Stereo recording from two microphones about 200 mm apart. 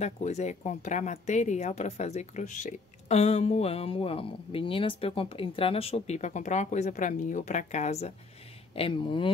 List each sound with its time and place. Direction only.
0.0 s speech: 35° left (ahead or behind)